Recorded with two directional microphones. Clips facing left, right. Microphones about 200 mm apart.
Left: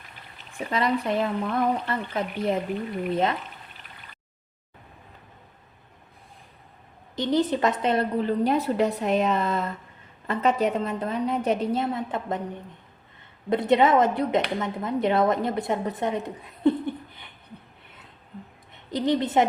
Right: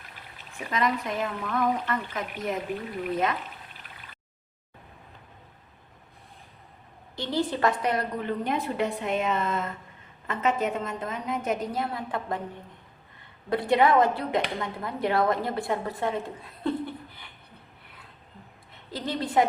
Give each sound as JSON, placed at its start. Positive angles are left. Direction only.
{"t": 0.7, "sound": "a woman's voice", "side_deg": 30}
{"t": 7.2, "sound": "a woman's voice", "side_deg": 20}
{"t": 13.5, "sound": "a woman's voice", "side_deg": 20}
{"t": 18.7, "sound": "a woman's voice", "side_deg": 20}